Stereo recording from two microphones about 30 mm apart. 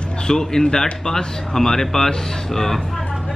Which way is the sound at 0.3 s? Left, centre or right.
Centre.